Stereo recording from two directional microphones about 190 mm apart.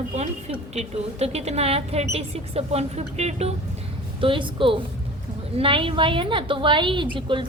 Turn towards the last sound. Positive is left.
turn(degrees=-25)  # may be behind; listen again after turning